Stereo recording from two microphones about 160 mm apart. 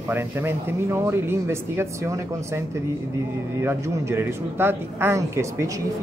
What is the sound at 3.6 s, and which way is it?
Speech, 15° right (ahead or behind).